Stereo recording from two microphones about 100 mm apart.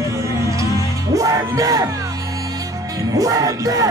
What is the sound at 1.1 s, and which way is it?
Music, 35° right (ahead or behind).